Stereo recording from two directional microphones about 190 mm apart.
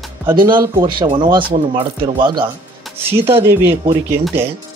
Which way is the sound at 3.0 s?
10° right (ahead or behind).